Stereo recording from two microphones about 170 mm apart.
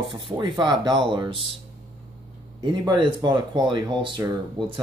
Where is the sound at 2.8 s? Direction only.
25° right (ahead or behind).